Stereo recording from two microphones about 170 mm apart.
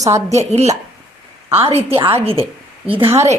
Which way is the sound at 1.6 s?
35° right (ahead or behind).